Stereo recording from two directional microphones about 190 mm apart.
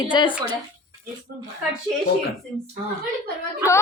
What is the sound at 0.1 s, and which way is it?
Speech, 25° left (ahead or behind).